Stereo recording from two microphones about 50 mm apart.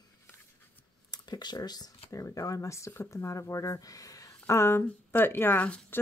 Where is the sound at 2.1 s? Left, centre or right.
Left.